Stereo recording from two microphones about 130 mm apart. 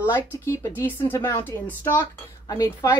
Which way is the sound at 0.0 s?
20° left (ahead or behind).